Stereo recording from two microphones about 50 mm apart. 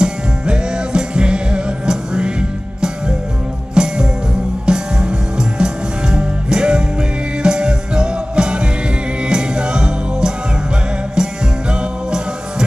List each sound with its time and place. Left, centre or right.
0.0 s music: centre
3.7 s music: centre